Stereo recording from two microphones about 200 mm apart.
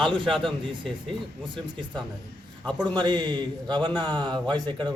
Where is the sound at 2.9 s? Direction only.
20° right (ahead or behind).